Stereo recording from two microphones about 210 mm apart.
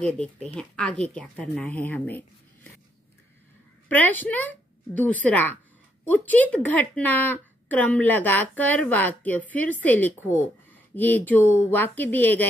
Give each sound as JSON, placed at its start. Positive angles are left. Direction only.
{"t": 0.6, "sound": "a woman's voice", "side_deg": 5}
{"t": 3.9, "sound": "a woman's voice", "side_deg": 10}